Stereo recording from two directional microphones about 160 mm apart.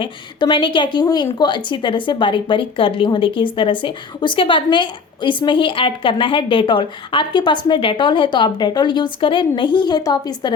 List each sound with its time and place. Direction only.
0.0 s a woman's voice: 30° left (ahead or behind)